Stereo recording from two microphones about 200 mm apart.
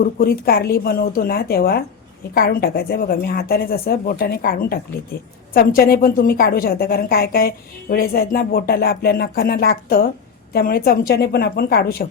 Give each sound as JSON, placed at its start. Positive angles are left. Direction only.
{"t": 0.0, "sound": "a woman's voice", "side_deg": 50}